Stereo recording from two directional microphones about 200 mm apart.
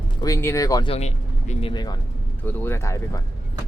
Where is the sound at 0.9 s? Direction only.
30° left (ahead or behind).